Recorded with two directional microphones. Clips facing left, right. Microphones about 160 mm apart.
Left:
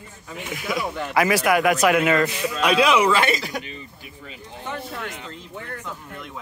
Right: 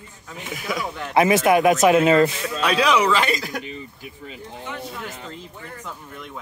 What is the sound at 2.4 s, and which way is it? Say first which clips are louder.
Speech: left 2 dB; 10° left (ahead or behind).